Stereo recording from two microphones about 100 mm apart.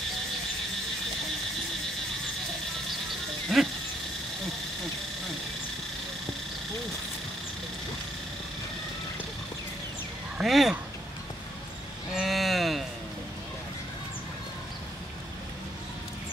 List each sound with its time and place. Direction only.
3.5 s goat: centre (ahead or behind)
10.3 s quack: centre (ahead or behind)
12.2 s a sound: centre (ahead or behind)